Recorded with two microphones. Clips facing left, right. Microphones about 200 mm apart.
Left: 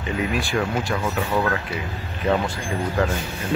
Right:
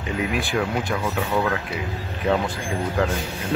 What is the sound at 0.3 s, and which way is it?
Speech, 20° right (ahead or behind).